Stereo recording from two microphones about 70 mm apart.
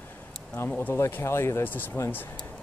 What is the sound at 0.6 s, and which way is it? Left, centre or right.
Speech, left.